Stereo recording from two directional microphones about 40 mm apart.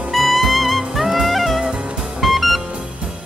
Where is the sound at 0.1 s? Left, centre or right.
Centre.